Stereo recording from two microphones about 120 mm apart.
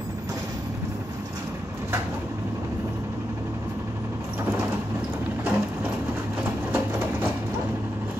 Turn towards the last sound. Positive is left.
turn(degrees=-20)  # may be behind; listen again after turning